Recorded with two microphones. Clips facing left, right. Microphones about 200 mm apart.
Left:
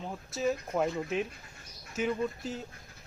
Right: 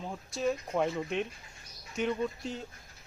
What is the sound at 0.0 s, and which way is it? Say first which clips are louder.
Speech: even; centre (ahead or behind).